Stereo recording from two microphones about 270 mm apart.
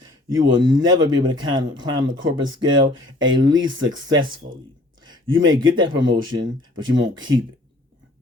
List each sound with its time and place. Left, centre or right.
0.0 s speech: centre
3.8 s speech: right
5.0 s speech: centre